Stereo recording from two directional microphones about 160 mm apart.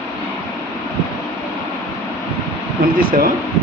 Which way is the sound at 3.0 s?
65° right (ahead or behind).